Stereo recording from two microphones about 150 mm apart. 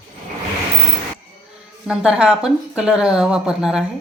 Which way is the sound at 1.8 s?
5° right (ahead or behind).